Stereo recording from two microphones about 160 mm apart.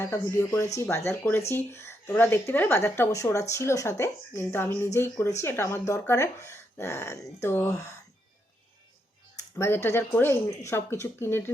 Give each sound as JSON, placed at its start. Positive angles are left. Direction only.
{"t": 0.0, "sound": "speech", "side_deg": 15}
{"t": 9.6, "sound": "speech", "side_deg": 15}